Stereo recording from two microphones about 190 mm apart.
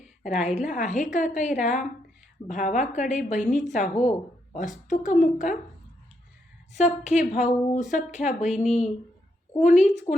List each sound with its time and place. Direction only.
0.5 s a woman's voice: 40° left (ahead or behind)
6.7 s a woman's voice: 40° left (ahead or behind)